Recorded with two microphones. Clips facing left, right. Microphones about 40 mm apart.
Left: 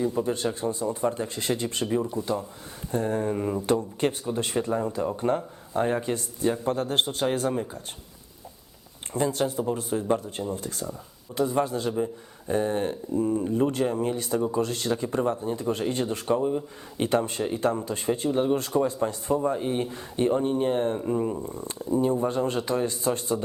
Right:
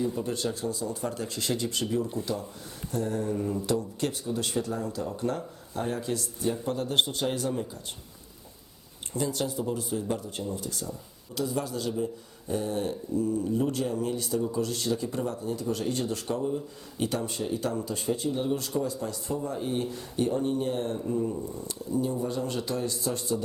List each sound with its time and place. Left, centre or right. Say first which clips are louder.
0.0 s speech: left 4 dB; left
3.8 s speech: left 4 dB; left
9.1 s speech: left 4 dB; left